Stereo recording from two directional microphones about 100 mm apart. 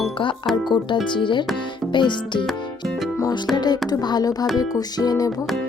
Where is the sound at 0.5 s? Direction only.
50° left (ahead or behind).